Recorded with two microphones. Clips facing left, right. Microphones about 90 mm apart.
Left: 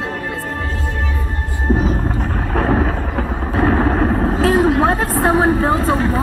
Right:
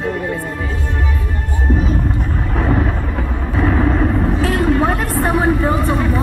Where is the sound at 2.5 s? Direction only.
45° left (ahead or behind).